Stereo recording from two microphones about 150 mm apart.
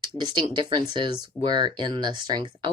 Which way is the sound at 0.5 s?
30° right (ahead or behind).